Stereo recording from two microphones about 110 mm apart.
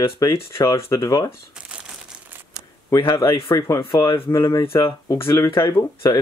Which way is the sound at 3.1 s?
25° left (ahead or behind).